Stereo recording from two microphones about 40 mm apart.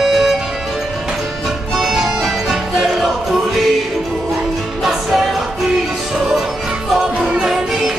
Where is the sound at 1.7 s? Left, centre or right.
Centre.